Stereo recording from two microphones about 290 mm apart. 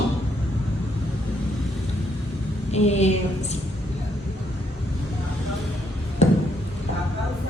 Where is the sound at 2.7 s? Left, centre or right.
Left.